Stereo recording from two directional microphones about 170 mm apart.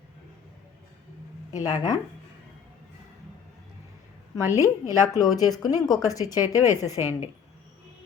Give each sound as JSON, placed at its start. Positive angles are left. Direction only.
{"t": 1.5, "sound": "speech", "side_deg": 25}
{"t": 4.4, "sound": "speech", "side_deg": 20}